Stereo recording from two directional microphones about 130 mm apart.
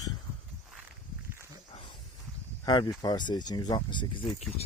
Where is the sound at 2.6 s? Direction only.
30° left (ahead or behind).